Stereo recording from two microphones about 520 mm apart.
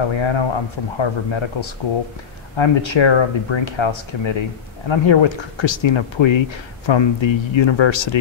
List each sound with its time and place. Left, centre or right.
0.0 s speech: left